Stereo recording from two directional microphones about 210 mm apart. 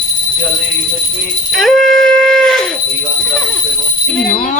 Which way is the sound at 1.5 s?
Centre (ahead or behind).